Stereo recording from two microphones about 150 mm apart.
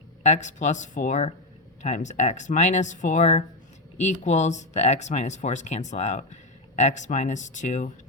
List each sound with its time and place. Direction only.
0.2 s speech: 50° left (ahead or behind)